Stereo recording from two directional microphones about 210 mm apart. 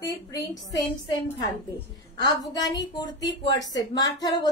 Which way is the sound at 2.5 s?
20° left (ahead or behind).